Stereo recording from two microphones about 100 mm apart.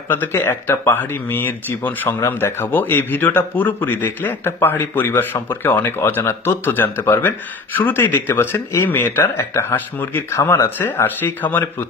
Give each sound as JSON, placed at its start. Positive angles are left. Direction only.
{"t": 0.1, "sound": "a man's voice", "side_deg": 20}